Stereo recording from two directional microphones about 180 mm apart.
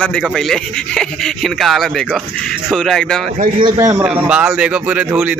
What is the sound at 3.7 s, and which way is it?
A man's voice, 15° right (ahead or behind).